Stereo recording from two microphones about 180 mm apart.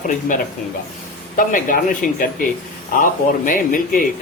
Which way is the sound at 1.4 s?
50° left (ahead or behind).